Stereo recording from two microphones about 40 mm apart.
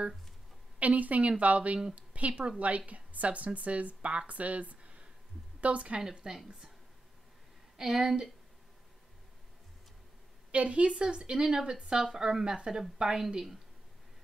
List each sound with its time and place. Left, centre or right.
0.7 s speech: right
5.9 s a woman's voice: centre
7.7 s a woman's voice: centre
10.5 s a woman's voice: right; by 13.6 s centre